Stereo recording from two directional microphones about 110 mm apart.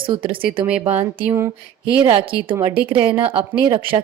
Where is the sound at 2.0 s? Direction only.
55° right (ahead or behind).